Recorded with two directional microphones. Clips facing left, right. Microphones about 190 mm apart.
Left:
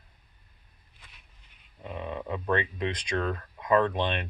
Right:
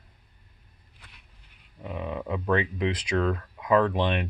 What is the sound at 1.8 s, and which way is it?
Speech, 10° right (ahead or behind).